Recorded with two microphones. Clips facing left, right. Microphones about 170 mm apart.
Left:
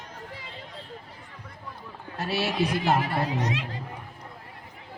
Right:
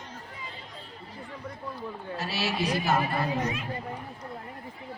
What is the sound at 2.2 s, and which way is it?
Run, 55° left (ahead or behind).